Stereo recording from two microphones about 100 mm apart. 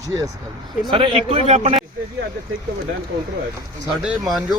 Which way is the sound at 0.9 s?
65° right (ahead or behind).